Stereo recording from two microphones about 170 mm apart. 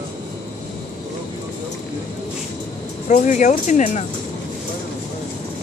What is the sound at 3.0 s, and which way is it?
Speech, 45° left (ahead or behind).